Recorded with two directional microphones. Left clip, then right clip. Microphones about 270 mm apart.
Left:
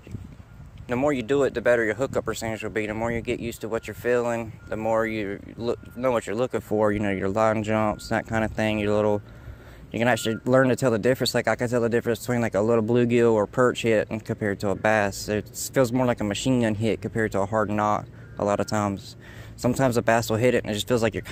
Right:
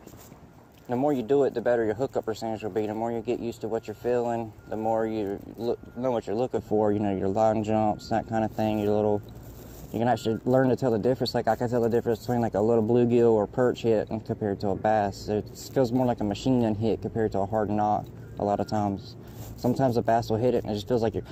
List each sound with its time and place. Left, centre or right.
0.9 s speech: left
13.4 s speech: left